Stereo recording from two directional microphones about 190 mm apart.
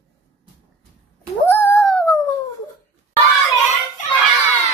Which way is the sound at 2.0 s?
15° left (ahead or behind).